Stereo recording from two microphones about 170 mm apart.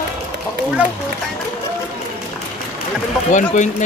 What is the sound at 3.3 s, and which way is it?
Speech, 45° left (ahead or behind).